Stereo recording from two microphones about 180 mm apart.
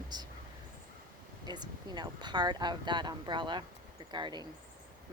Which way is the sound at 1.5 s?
25° right (ahead or behind).